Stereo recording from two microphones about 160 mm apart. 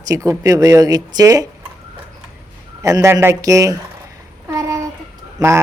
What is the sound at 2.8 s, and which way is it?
A man's voice, 20° right (ahead or behind).